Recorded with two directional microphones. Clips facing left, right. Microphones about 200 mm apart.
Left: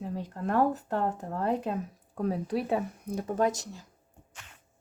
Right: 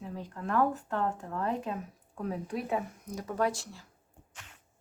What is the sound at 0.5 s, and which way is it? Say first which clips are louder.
Speech: left 2 dB; 40° left (ahead or behind).